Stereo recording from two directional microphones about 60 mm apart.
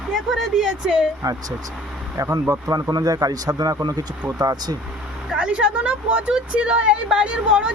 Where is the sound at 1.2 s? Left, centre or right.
Right.